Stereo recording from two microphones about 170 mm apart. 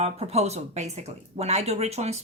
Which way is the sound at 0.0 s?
40° right (ahead or behind).